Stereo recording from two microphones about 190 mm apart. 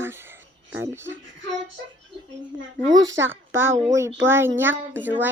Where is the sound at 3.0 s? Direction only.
80° right.